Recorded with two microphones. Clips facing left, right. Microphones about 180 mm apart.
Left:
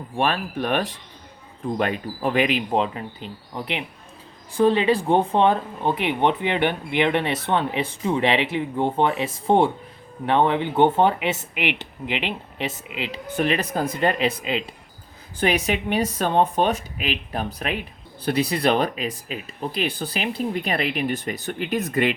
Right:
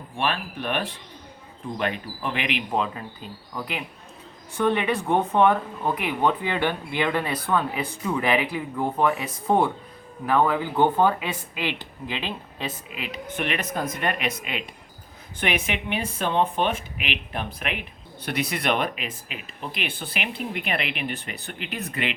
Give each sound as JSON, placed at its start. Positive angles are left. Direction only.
{"t": 0.2, "sound": "speech", "side_deg": 45}